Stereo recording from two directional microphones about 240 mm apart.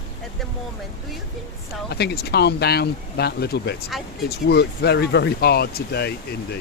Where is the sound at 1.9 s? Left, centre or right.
Left.